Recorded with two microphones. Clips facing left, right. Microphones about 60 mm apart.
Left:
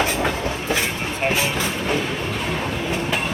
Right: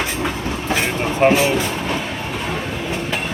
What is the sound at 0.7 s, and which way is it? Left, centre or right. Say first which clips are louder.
Vehicle: right 7 dB; right.